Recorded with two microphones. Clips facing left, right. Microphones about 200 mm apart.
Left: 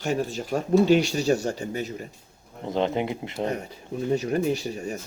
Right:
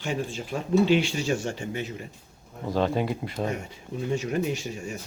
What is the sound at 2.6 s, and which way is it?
Speech, 20° left (ahead or behind).